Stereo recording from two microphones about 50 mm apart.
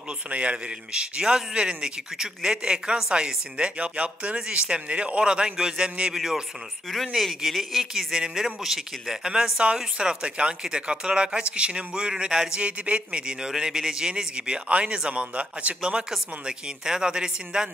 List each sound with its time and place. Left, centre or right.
0.3 s speech: right
7.2 s speech: centre
7.9 s speech: centre